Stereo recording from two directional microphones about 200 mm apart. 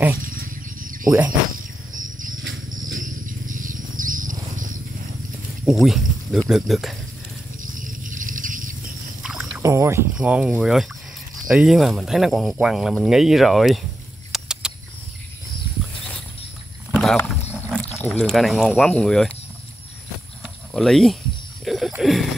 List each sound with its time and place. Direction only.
0.3 s wild animals: 45° right (ahead or behind)
1.0 s cricket: 10° right (ahead or behind)
2.0 s cricket: 40° right (ahead or behind)
3.0 s a sound: 40° right (ahead or behind)
5.7 s speech: centre (ahead or behind)
7.6 s a sound: 40° right (ahead or behind)
9.2 s pour: centre (ahead or behind)
9.6 s speech: 15° right (ahead or behind)
14.3 s a sound: 5° right (ahead or behind)
16.9 s wild animals: centre (ahead or behind)
18.0 s speech: 5° left (ahead or behind)
20.4 s horse: centre (ahead or behind)
21.6 s speech: centre (ahead or behind)